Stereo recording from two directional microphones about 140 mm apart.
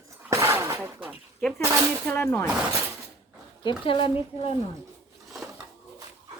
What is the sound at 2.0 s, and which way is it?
Speech, 15° left (ahead or behind).